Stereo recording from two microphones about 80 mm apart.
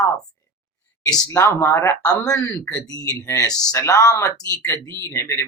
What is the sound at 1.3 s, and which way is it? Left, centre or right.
Speech, left.